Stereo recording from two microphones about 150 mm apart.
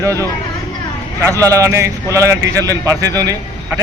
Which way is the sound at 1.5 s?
20° right (ahead or behind).